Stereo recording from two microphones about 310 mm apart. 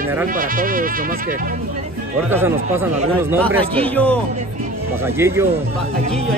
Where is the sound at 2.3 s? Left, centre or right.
Centre.